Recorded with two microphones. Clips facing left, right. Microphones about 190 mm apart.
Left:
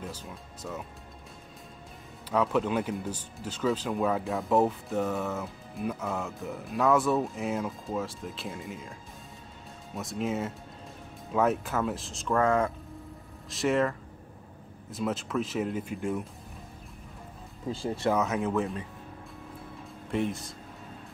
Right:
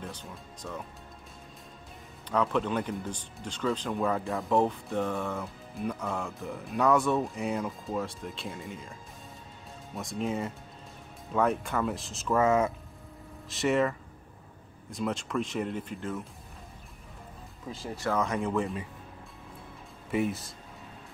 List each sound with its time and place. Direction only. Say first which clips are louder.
0.0 s speech: left 1 dB; 5° left (ahead or behind)
2.2 s speech: left 1 dB; 5° left (ahead or behind)
9.9 s speech: left 1 dB; centre (ahead or behind)
17.6 s speech: left 5 dB; 30° left (ahead or behind)
18.1 s speech: right 2 dB; 5° left (ahead or behind)
20.1 s speech: right 1 dB; 5° right (ahead or behind)